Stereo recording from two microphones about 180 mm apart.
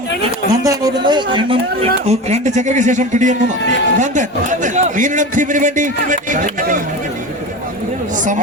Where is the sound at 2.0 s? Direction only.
40° right (ahead or behind).